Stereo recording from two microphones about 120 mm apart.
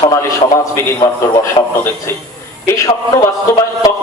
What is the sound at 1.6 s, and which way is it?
Speech, 50° left (ahead or behind).